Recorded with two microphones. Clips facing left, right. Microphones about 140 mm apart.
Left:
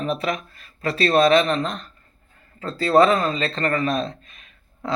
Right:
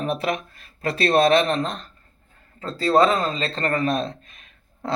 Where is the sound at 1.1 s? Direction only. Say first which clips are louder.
Left 1 dB; 40° right (ahead or behind).